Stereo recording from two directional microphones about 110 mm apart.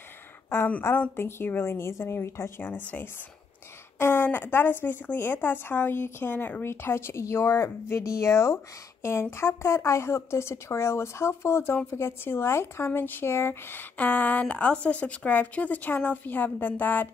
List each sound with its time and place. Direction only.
0.5 s a woman's voice: 15° left (ahead or behind)
4.0 s a woman's voice: 20° left (ahead or behind)